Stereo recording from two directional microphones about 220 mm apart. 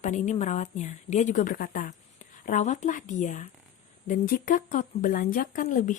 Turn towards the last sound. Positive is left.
turn(degrees=35)  # may be behind; listen again after turning